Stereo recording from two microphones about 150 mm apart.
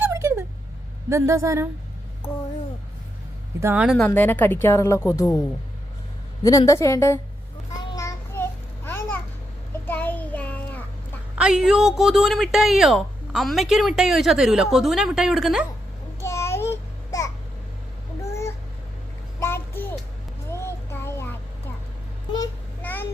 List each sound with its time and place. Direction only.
0.0 s a sound: 20° right (ahead or behind)
1.1 s a woman's voice: 20° right (ahead or behind)
3.6 s speech: 15° right (ahead or behind)
3.8 s a woman's voice: 5° left (ahead or behind)
6.4 s a woman's voice: 20° left (ahead or behind)
7.9 s a sound: 20° left (ahead or behind)
9.8 s child singing: 10° left (ahead or behind)
11.3 s speech: 5° right (ahead or behind)
16.2 s babbling: 20° left (ahead or behind)
19.4 s a sound: 15° left (ahead or behind)
20.5 s music: 20° left (ahead or behind)
22.8 s a sound: 15° left (ahead or behind)